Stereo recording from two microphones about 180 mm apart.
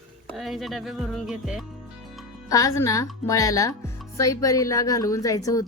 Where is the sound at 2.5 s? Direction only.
20° left (ahead or behind).